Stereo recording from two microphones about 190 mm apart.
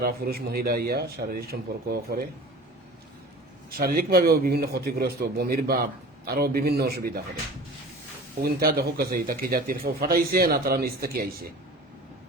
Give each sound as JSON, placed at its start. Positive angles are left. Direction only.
{"t": 0.0, "sound": "a man's voice", "side_deg": -55}
{"t": 3.7, "sound": "a man's voice", "side_deg": -50}
{"t": 8.4, "sound": "a man's voice", "side_deg": -50}